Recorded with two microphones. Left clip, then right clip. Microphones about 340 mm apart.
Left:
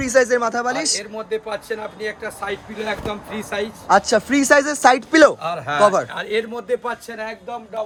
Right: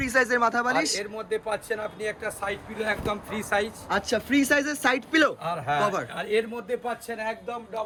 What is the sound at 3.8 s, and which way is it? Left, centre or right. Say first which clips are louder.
A man's voice: left 11 dB; centre.